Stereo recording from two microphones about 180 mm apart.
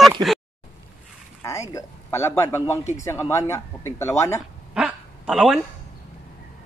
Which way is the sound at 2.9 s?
15° left (ahead or behind).